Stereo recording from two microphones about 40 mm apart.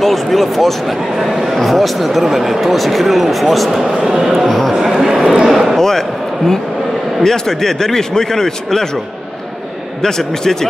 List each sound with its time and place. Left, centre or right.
0.0 s speech: centre
4.0 s a man's voice: centre
4.4 s a man's voice: centre
5.8 s a man's voice: centre
10.0 s a man's voice: centre